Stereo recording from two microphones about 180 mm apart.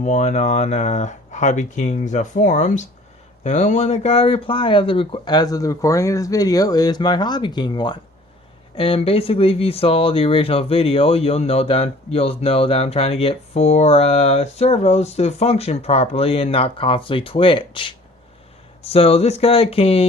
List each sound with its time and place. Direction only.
0.0 s speech: 40° left (ahead or behind)